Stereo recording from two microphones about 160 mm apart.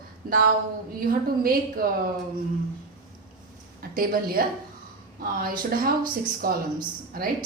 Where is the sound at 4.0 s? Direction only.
65° right (ahead or behind).